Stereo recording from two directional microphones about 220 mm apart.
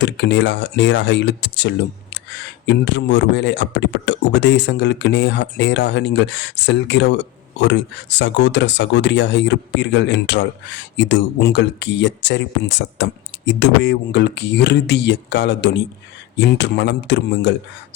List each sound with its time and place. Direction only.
0.0 s speech: 55° left (ahead or behind)